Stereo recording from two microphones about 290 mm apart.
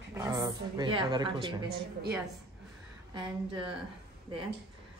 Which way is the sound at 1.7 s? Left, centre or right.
Right.